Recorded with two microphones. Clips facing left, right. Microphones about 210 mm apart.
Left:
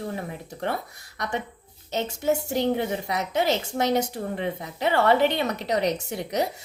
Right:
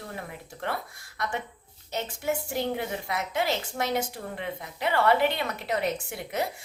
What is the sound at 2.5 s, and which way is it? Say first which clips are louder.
A woman's voice: left 5 dB; 25° left (ahead or behind).